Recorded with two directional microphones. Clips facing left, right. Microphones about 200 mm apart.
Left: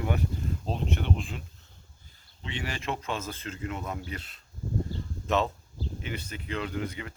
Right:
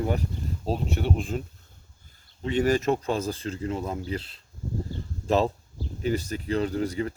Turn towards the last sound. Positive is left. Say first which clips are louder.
# right 7 dB
turn(degrees=-35)  # may be behind; listen again after turning